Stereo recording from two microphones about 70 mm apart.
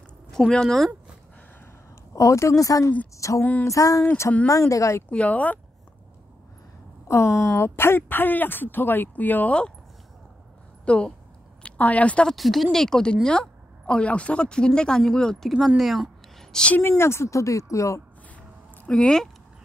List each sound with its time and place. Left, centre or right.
0.3 s speech: centre
2.1 s a woman's voice: left
3.2 s a sound: left
3.6 s a woman's voice: left
5.1 s speech: left
7.1 s speech: left; by 9.7 s centre
10.9 s speech: centre
12.3 s speech: centre
16.7 s a woman's voice: left
18.9 s speech: centre